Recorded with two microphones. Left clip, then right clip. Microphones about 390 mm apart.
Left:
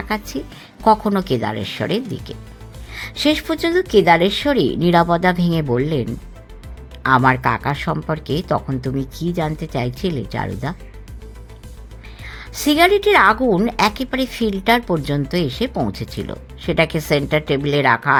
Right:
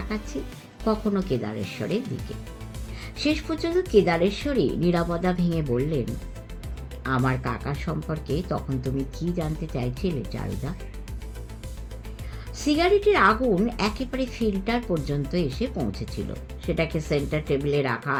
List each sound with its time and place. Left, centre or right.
0.9 s speech: left
12.4 s a woman's voice: left